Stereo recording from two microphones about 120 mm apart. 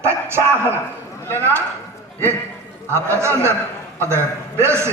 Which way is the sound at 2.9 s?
20° right (ahead or behind).